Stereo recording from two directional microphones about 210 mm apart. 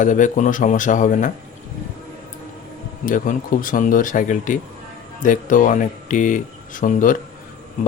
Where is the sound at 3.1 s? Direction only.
40° left (ahead or behind).